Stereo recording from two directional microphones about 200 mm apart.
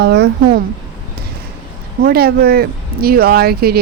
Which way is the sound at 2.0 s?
50° right (ahead or behind).